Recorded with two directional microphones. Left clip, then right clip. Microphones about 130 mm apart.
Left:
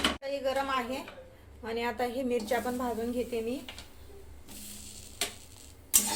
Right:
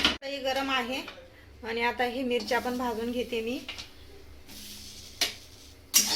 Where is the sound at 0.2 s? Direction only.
50° right (ahead or behind).